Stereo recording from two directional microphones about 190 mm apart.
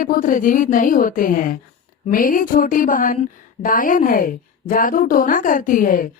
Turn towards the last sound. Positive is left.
turn(degrees=45)  # may be behind; listen again after turning